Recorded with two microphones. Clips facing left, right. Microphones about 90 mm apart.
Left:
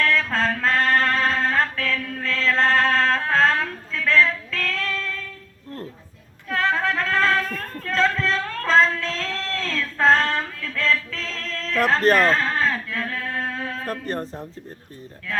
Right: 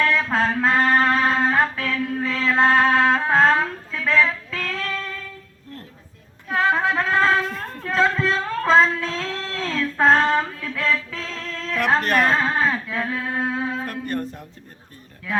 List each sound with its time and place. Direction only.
0.0 s music: 15° right (ahead or behind)
6.5 s a sound: 15° right (ahead or behind)
13.8 s speech: 35° left (ahead or behind)